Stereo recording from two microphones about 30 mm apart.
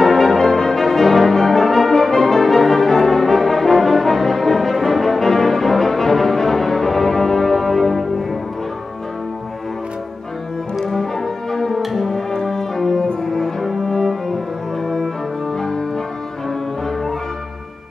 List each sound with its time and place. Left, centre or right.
0.0 s brass instrument: centre
11.5 s brass instrument: centre
15.5 s music: centre